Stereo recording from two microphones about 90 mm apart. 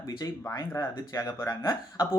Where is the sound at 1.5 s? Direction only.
40° left (ahead or behind).